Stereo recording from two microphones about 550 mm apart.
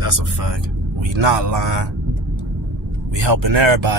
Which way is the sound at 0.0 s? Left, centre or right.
Right.